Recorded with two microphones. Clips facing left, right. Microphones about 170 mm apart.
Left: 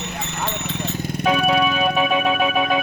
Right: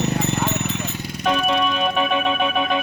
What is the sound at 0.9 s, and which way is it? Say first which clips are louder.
Music: left 5 dB; 50° left (ahead or behind).